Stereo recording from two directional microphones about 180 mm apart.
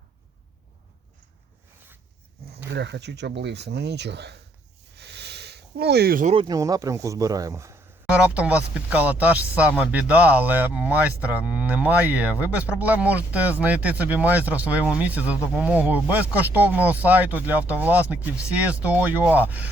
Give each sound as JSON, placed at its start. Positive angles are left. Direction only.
{"t": 2.6, "sound": "speech", "side_deg": -75}
{"t": 4.9, "sound": "a sound", "side_deg": -70}
{"t": 6.2, "sound": "speech", "side_deg": -30}